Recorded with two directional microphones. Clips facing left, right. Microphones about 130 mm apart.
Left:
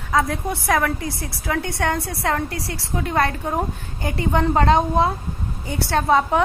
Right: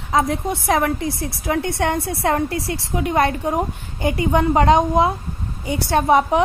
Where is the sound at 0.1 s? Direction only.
20° right (ahead or behind).